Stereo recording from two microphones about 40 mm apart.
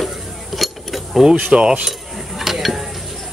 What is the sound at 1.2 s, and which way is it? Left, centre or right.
Speech, right.